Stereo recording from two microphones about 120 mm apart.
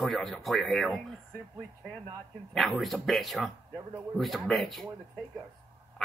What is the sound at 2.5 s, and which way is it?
Speech, centre (ahead or behind).